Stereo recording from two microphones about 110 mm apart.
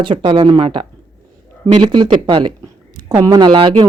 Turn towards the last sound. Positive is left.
turn(degrees=-50)  # may be behind; listen again after turning